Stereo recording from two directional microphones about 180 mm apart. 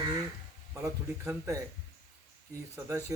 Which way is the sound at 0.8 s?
15° right (ahead or behind).